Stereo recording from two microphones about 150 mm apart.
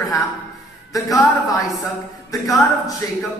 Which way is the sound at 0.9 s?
25° left (ahead or behind).